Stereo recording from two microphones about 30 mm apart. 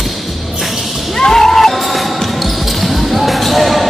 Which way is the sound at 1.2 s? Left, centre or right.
Centre.